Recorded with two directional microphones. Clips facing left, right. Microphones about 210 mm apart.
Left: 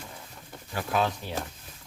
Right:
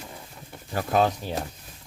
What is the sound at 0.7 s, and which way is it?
Speech, 40° right (ahead or behind).